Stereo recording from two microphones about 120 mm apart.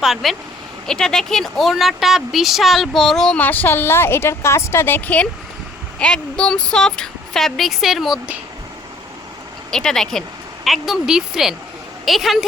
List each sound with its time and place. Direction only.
0.0 s speech: centre (ahead or behind)
9.7 s speech: 5° left (ahead or behind)